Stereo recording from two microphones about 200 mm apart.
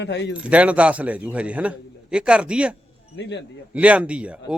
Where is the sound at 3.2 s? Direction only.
60° left (ahead or behind).